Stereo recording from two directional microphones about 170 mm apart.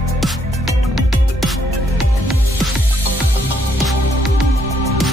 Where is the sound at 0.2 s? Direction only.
Centre (ahead or behind).